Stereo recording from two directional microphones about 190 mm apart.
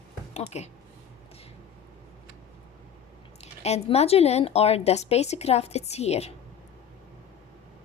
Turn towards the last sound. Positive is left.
turn(degrees=35)  # may be behind; listen again after turning